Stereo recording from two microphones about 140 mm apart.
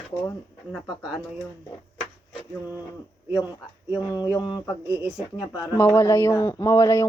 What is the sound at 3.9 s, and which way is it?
Speech, 25° left (ahead or behind).